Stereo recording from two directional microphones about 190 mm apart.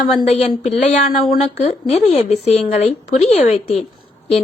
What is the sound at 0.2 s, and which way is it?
A woman's voice, 35° left (ahead or behind).